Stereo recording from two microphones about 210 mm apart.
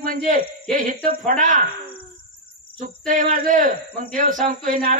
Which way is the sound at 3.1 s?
40° right (ahead or behind).